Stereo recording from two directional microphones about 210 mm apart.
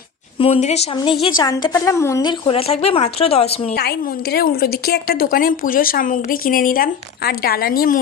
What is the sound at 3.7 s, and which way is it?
A woman's voice, 50° left (ahead or behind).